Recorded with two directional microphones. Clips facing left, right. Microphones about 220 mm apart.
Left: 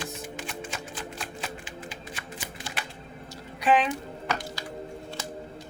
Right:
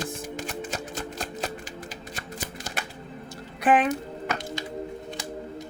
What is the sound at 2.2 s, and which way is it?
Music, 40° right (ahead or behind).